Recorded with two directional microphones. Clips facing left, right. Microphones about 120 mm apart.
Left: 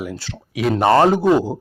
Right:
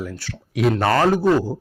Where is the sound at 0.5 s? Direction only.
Centre (ahead or behind).